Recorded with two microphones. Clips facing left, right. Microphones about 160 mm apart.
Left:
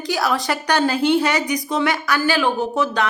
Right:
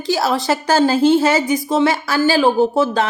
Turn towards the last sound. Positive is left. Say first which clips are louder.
# right 6 dB
turn(degrees=-30)  # may be behind; listen again after turning